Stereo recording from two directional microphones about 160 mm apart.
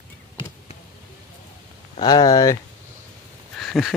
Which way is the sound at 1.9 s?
25° left (ahead or behind).